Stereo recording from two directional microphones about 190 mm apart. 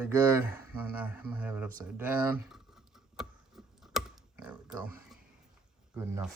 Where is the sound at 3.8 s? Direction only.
5° right (ahead or behind).